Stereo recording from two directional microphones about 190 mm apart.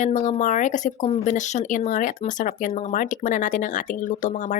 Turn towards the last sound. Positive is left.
turn(degrees=40)  # may be behind; listen again after turning